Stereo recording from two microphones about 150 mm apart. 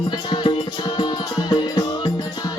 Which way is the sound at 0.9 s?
30° left (ahead or behind).